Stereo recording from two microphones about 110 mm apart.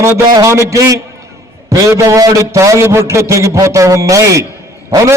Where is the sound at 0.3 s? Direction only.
30° right (ahead or behind).